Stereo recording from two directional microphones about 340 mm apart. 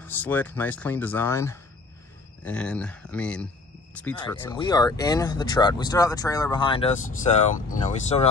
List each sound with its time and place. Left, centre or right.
0.0 s speech: centre; by 8.3 s left